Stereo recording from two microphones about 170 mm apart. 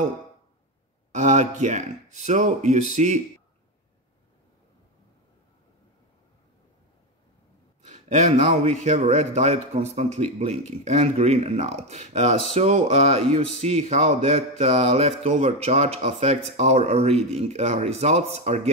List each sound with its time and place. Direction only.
1.1 s speech: 45° right (ahead or behind)
7.8 s a sound: 45° right (ahead or behind)
8.5 s speech: 45° right (ahead or behind)